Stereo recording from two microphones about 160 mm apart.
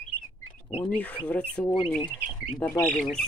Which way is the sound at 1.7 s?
30° left (ahead or behind).